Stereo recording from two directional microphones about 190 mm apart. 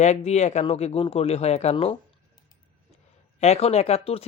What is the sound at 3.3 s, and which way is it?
Speech, 35° left (ahead or behind).